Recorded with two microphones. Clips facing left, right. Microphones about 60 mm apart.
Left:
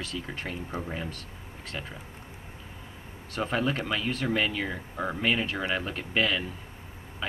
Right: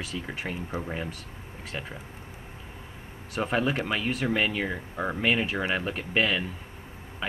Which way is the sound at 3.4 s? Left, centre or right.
Centre.